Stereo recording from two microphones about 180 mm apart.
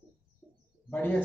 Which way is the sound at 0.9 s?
10° left (ahead or behind).